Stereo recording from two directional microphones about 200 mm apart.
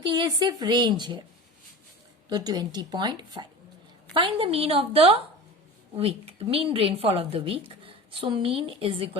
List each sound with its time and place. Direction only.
0.0 s a woman's voice: 20° right (ahead or behind)
2.3 s a woman's voice: 20° right (ahead or behind)